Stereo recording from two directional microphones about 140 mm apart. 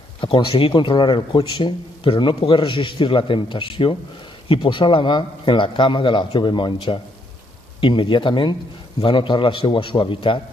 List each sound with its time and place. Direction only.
0.2 s speech: 40° left (ahead or behind)